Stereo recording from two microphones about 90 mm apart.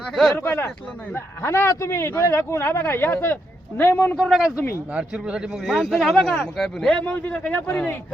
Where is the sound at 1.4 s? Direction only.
30° left (ahead or behind).